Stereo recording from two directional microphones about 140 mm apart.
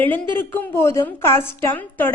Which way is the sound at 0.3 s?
15° left (ahead or behind).